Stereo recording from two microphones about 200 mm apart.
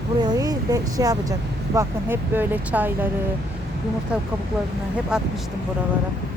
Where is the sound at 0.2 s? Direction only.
20° right (ahead or behind).